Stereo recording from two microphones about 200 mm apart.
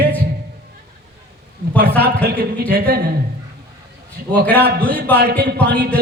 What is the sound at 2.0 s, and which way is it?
Speech, 50° right (ahead or behind).